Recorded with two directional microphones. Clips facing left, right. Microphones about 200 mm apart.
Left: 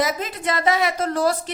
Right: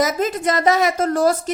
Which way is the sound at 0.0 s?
45° right (ahead or behind).